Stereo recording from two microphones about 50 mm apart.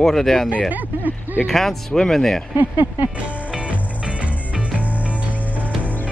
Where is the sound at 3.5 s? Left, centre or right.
Right.